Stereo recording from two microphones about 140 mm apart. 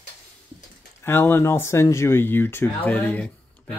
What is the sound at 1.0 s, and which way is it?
Speech, 15° left (ahead or behind).